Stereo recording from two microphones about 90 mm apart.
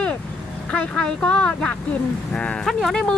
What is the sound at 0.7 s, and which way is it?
Speech, 10° left (ahead or behind).